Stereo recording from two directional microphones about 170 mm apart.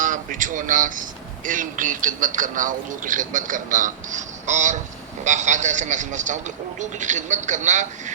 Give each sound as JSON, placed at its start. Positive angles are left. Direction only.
{"t": 0.0, "sound": "a man's voice", "side_deg": -50}